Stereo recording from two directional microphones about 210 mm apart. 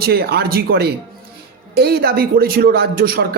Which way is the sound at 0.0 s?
50° right (ahead or behind).